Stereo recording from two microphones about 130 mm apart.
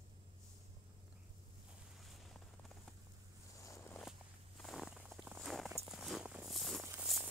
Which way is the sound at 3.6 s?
20° left (ahead or behind).